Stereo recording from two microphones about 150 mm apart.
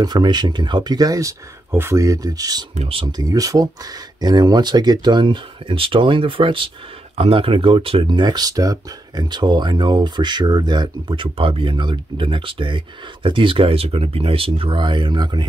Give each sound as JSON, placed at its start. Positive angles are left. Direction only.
{"t": 0.0, "sound": "speech", "side_deg": -30}
{"t": 2.7, "sound": "speech", "side_deg": -40}